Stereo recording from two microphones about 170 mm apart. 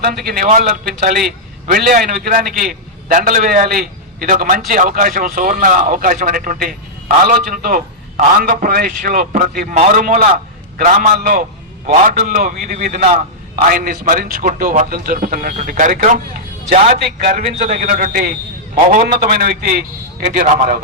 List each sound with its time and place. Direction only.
0.0 s a man's voice: 60° right (ahead or behind)
11.9 s a man's voice: 45° right (ahead or behind); by 17.4 s 65° right (ahead or behind)
17.4 s a man's voice: 45° right (ahead or behind)
19.2 s a man's voice: 60° right (ahead or behind)